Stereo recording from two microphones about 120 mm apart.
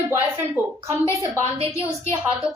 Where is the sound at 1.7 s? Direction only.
20° left (ahead or behind).